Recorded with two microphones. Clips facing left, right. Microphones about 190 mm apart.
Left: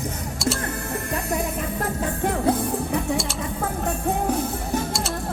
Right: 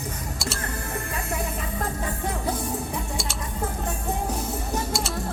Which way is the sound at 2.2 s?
65° left (ahead or behind).